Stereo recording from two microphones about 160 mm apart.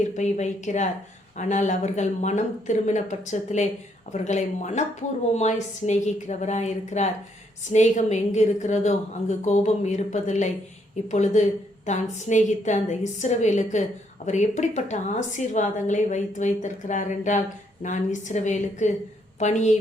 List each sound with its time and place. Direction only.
0.2 s a woman's voice: 45° left (ahead or behind)